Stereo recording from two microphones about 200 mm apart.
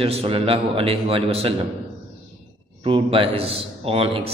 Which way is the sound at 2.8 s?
25° right (ahead or behind).